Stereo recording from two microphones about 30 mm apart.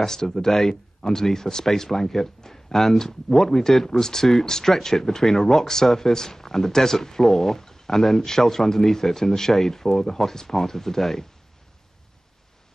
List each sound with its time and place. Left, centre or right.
0.0 s speech: centre